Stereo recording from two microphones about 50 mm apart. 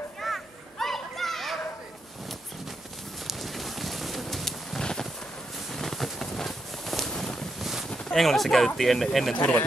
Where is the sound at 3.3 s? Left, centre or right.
Centre.